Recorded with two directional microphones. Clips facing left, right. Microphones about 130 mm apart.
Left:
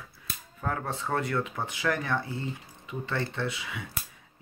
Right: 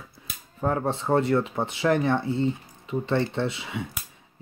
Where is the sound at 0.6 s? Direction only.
30° right (ahead or behind).